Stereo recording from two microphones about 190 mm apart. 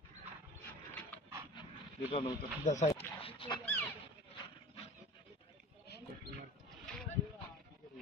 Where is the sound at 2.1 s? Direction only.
30° left (ahead or behind).